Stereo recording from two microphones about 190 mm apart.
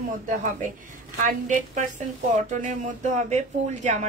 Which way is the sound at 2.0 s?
40° right (ahead or behind).